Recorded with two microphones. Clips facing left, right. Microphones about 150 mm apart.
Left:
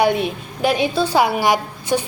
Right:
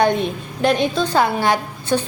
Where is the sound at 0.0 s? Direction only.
10° left (ahead or behind).